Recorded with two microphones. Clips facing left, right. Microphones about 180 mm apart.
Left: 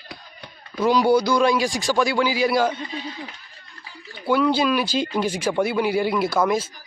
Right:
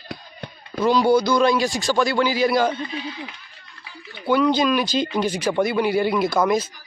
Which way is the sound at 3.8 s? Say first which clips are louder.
Right 1 dB; 40° left (ahead or behind).